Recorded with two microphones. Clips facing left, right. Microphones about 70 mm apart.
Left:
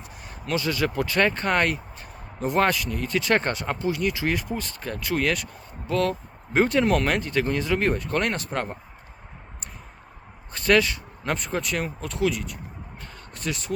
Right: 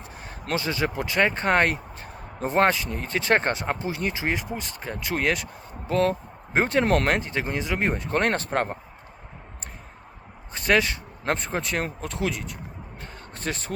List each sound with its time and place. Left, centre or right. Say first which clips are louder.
0.0 s speech: right 1 dB; right
8.3 s speech: right 3 dB; right
10.5 s speech: left 2 dB; right